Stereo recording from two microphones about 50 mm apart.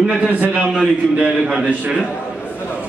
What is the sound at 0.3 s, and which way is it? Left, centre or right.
Speech, right.